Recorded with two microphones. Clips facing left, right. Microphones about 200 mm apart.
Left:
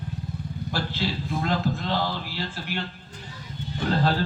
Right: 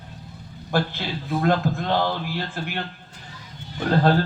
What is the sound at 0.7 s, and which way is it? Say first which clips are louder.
A man's voice: right 4 dB; 50° right (ahead or behind).